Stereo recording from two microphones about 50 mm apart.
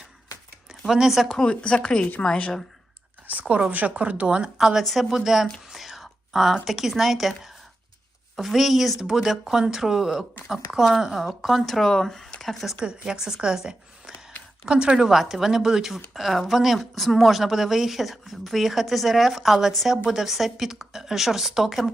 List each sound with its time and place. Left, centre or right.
0.9 s speech: centre
1.5 s speech: left
3.5 s speech: right
4.5 s speech: centre
12.8 s speech: centre
15.0 s speech: centre